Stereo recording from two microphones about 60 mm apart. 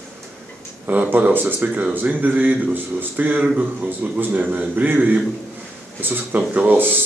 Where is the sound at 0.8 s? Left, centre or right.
Right.